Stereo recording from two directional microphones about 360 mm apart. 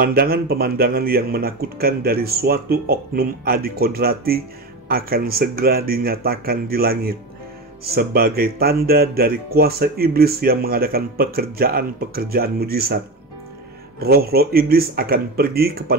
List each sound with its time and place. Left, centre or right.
0.0 s speech: right